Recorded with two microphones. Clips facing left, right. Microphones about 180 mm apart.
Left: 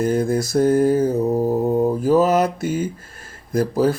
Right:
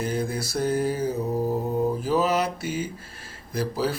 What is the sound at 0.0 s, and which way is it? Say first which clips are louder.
Speech: left 8 dB; 50° left (ahead or behind).